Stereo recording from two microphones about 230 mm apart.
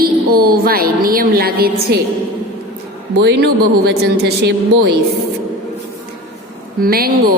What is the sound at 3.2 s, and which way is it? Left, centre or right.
Mantra, right.